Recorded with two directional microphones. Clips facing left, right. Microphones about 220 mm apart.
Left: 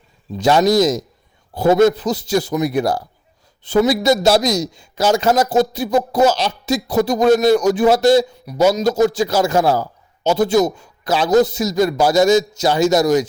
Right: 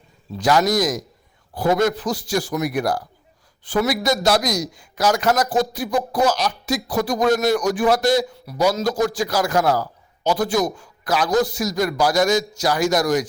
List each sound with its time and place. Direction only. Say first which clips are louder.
0.3 s a man's voice: left 5 dB; 25° left (ahead or behind)